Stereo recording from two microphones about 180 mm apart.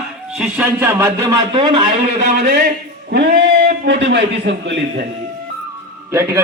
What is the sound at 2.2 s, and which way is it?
Speech, 60° right (ahead or behind).